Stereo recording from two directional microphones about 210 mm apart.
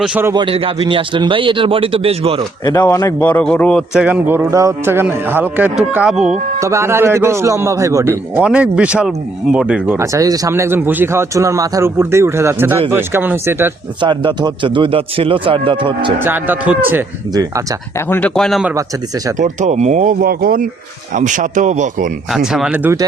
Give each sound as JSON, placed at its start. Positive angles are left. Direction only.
{"t": 0.0, "sound": "a man's voice", "side_deg": -5}
{"t": 0.3, "sound": "a man's voice", "side_deg": -25}
{"t": 2.6, "sound": "a man's voice", "side_deg": 15}
{"t": 6.6, "sound": "a man's voice", "side_deg": -15}
{"t": 14.0, "sound": "a man's voice", "side_deg": -20}
{"t": 16.1, "sound": "a man's voice", "side_deg": -10}
{"t": 18.1, "sound": "a man's voice", "side_deg": 5}
{"t": 19.4, "sound": "speech", "side_deg": -35}
{"t": 22.3, "sound": "a man's voice", "side_deg": 0}